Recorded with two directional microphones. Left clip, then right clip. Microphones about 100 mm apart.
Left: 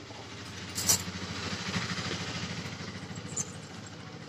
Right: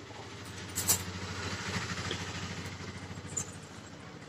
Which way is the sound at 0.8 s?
30° left (ahead or behind).